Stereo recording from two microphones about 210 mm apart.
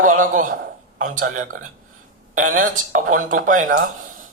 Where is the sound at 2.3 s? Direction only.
40° right (ahead or behind).